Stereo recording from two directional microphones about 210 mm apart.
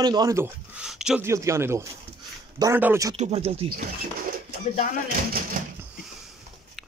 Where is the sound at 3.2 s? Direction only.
30° right (ahead or behind).